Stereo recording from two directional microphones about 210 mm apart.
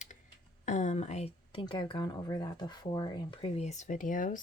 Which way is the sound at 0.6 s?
35° left (ahead or behind).